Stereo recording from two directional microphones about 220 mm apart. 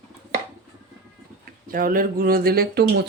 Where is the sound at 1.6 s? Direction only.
40° right (ahead or behind).